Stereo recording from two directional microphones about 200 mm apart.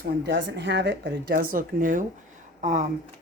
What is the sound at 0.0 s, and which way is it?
Speech, 50° right (ahead or behind).